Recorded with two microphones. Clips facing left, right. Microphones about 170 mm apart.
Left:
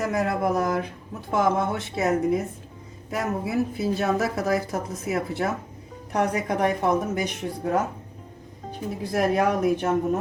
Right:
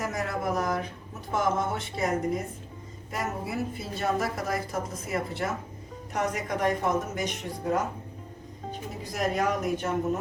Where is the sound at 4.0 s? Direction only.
70° left (ahead or behind).